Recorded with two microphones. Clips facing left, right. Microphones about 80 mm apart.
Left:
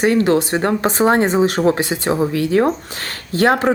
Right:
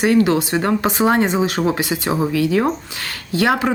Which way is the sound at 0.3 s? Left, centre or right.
Left.